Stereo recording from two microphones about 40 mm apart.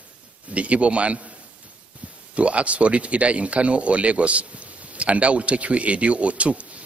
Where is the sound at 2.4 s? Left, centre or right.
Right.